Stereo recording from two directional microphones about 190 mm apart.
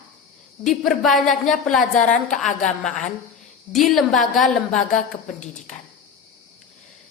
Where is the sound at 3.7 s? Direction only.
Centre (ahead or behind).